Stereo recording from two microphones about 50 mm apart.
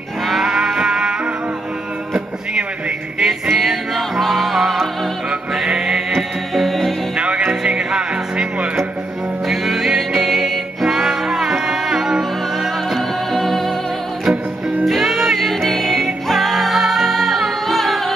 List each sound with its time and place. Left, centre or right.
0.3 s music: centre
3.2 s music: centre
5.8 s music: centre
6.1 s music: centre
7.2 s music: right
9.5 s music: centre
12.9 s music: centre
14.9 s music: centre